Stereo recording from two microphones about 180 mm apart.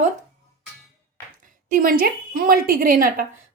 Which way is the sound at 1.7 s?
50° right (ahead or behind).